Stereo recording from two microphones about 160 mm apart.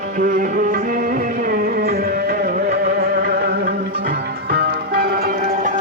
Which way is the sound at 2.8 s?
65° right (ahead or behind).